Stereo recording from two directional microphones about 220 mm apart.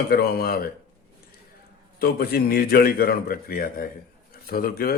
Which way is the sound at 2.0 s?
45° left (ahead or behind).